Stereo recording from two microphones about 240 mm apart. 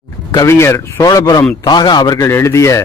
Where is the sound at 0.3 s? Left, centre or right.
Centre.